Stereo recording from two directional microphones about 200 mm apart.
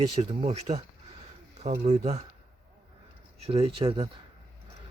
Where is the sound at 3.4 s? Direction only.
30° right (ahead or behind).